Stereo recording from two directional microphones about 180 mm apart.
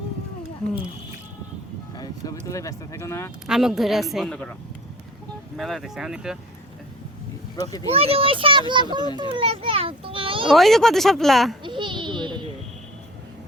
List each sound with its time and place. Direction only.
2.0 s speech: 20° left (ahead or behind)
3.4 s a woman's voice: 5° right (ahead or behind)
5.5 s a woman's voice: centre (ahead or behind)
7.5 s speech: 20° left (ahead or behind)
7.9 s a child's voice: 30° right (ahead or behind)
10.5 s a woman's voice: centre (ahead or behind)
11.6 s a sound: 25° right (ahead or behind)